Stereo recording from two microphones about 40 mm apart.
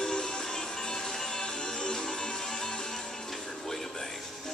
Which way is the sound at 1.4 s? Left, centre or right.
Left.